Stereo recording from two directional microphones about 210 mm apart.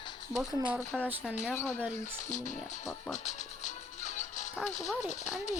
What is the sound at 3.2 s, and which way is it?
Music, 35° left (ahead or behind).